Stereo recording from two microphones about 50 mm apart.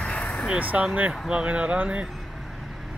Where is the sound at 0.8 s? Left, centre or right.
Right.